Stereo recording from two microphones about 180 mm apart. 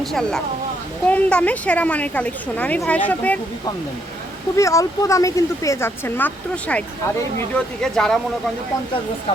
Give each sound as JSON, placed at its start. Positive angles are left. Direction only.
{"t": 0.0, "sound": "speech", "side_deg": 0}
{"t": 4.5, "sound": "speech", "side_deg": 15}